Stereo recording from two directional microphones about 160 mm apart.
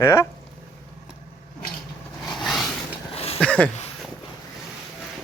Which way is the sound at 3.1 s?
40° left (ahead or behind).